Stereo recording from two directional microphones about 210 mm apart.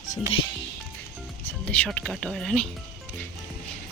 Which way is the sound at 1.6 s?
5° left (ahead or behind).